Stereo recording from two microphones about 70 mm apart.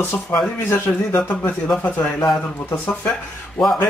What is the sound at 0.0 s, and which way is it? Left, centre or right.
Speech, left.